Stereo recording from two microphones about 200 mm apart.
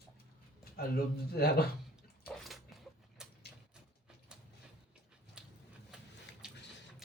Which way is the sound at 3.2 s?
5° right (ahead or behind).